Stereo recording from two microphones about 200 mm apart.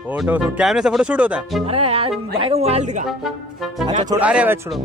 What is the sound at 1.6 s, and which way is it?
Music, 30° right (ahead or behind).